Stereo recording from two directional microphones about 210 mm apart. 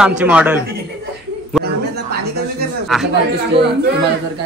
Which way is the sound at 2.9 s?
Centre (ahead or behind).